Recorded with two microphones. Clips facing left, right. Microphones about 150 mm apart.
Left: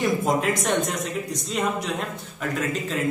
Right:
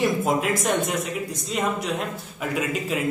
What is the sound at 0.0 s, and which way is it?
Speech, 5° right (ahead or behind).